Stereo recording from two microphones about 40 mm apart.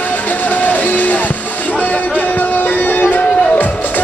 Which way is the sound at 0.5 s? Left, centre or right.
Left.